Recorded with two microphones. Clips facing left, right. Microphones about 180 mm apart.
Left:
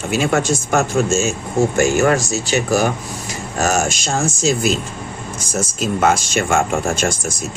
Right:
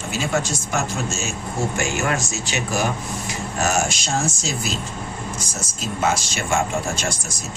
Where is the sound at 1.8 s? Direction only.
40° left (ahead or behind).